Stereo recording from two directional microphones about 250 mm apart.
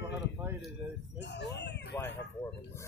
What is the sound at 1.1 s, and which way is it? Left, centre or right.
Speech, left.